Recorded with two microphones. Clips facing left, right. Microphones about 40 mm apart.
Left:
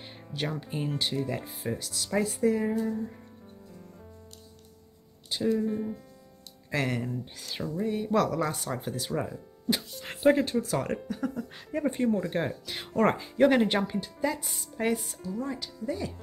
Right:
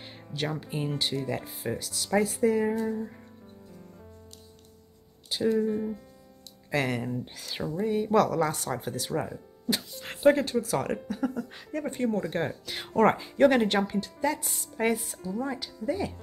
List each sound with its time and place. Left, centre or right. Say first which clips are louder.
0.0 s speech: right 1 dB; centre
5.3 s speech: right 2 dB; centre
7.6 s speech: right 1 dB; centre
7.9 s speech: right 3 dB; centre
11.7 s speech: left 3 dB; centre
12.0 s speech: right 2 dB; centre